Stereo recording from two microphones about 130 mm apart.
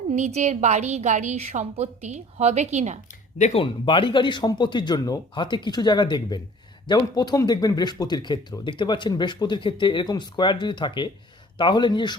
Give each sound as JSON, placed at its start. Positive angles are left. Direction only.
{"t": 0.1, "sound": "a woman's voice", "side_deg": -60}
{"t": 3.5, "sound": "speech", "side_deg": 40}